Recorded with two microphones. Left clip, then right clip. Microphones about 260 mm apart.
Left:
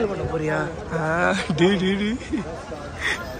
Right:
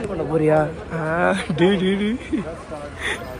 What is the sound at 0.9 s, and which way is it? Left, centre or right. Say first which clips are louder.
Speech: even; centre.